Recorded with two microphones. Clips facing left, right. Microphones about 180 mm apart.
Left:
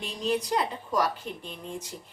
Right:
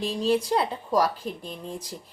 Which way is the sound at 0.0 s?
30° right (ahead or behind).